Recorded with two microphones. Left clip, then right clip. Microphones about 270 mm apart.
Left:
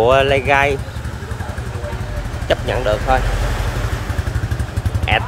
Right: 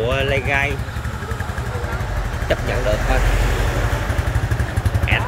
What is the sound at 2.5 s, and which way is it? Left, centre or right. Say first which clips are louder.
Speech: left 4 dB; centre.